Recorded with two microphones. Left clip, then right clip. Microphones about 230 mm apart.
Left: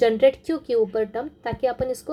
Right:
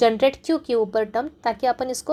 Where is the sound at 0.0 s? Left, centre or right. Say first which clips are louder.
Even; centre.